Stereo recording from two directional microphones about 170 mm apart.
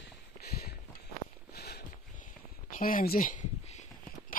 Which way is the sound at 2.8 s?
55° left (ahead or behind).